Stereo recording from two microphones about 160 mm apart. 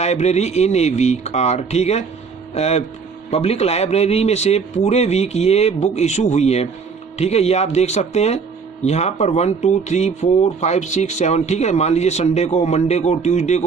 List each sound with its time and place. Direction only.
0.0 s a man's voice: 45° left (ahead or behind)